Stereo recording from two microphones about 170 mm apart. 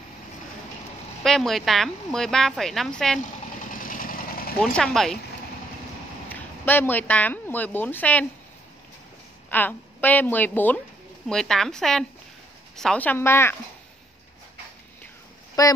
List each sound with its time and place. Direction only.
1.2 s speech: centre (ahead or behind)
3.7 s vehicle: 55° left (ahead or behind)
4.6 s speech: 5° left (ahead or behind)
6.2 s a woman's voice: 10° left (ahead or behind)
9.5 s a woman's voice: 10° left (ahead or behind)
15.6 s speech: 20° left (ahead or behind)